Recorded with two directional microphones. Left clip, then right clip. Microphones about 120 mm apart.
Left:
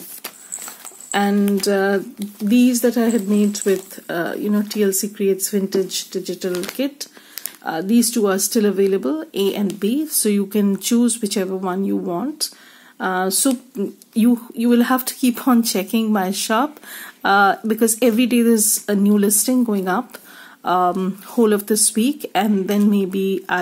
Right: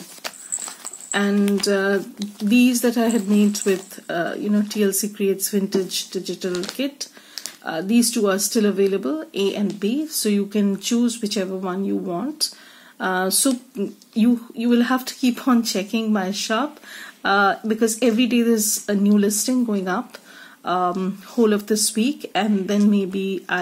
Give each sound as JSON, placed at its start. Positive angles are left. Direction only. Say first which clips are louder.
{"t": 1.1, "sound": "speech", "louder": "left 2 dB", "side_deg": 40}
{"t": 3.9, "sound": "speech", "louder": "left 1 dB", "side_deg": 35}
{"t": 4.7, "sound": "speech", "louder": "left 4 dB", "side_deg": 20}
{"t": 14.1, "sound": "speech", "louder": "left 2 dB", "side_deg": 45}